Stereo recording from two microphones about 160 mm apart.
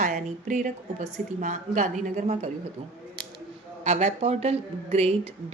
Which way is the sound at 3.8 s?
45° right (ahead or behind).